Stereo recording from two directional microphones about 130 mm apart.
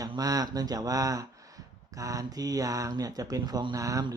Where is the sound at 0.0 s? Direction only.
30° right (ahead or behind).